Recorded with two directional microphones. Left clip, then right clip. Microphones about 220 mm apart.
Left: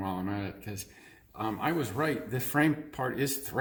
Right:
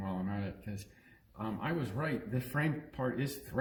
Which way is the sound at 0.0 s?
35° left (ahead or behind).